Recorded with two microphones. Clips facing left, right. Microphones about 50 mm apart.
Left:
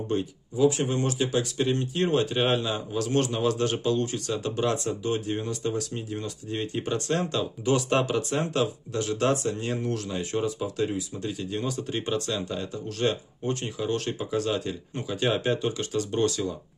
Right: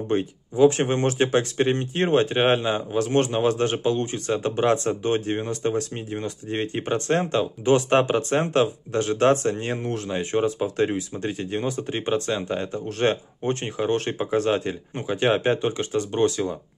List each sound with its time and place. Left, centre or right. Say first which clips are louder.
0.1 s speech: right 5 dB; right